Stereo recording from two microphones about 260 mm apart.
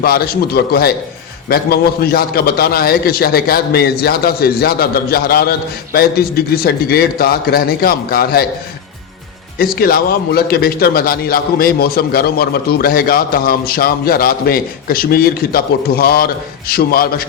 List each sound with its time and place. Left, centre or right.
0.0 s a man's voice: left
9.6 s a man's voice: left